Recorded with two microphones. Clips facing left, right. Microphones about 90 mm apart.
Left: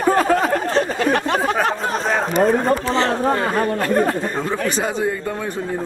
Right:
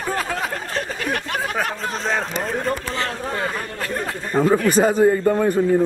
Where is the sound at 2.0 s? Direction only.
10° left (ahead or behind).